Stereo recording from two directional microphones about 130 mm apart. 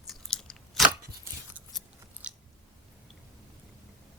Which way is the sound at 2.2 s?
10° right (ahead or behind).